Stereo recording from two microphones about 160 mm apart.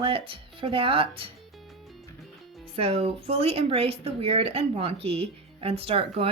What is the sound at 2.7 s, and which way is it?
Speech, 40° right (ahead or behind).